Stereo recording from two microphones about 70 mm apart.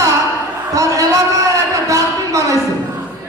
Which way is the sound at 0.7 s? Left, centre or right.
Right.